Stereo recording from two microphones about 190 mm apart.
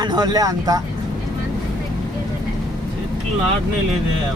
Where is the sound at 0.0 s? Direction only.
20° right (ahead or behind).